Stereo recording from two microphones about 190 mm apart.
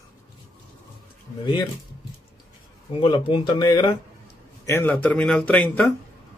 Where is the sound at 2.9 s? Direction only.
25° left (ahead or behind); by 5.9 s 10° left (ahead or behind).